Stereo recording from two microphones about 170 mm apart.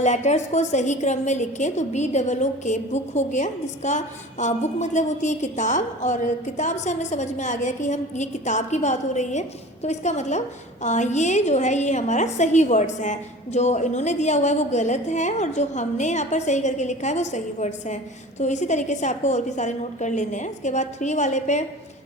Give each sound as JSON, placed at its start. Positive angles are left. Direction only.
{"t": 0.0, "sound": "a woman's voice", "side_deg": 45}